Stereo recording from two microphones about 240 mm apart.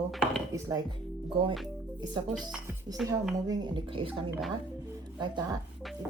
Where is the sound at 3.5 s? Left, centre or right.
Right.